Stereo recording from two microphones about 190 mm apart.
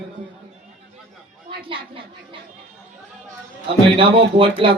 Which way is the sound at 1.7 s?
25° right (ahead or behind).